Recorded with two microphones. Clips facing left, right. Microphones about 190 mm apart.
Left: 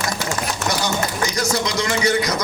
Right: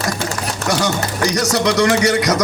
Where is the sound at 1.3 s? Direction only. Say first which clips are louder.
Right 5 dB; 75° right (ahead or behind).